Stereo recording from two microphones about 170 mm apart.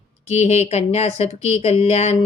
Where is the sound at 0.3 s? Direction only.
40° left (ahead or behind).